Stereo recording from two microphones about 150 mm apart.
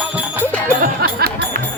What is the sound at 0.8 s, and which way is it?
Speech, 85° right.